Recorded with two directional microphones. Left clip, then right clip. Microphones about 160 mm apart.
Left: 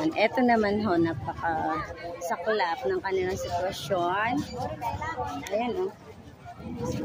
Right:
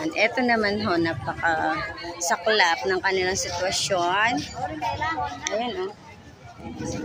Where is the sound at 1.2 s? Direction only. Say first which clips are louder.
Right 5 dB; centre (ahead or behind).